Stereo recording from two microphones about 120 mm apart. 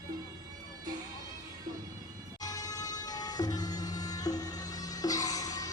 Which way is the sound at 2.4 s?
30° left (ahead or behind).